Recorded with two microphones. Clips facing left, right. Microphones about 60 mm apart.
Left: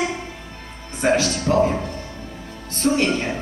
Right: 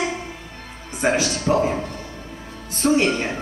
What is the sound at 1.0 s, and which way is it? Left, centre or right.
Music, centre.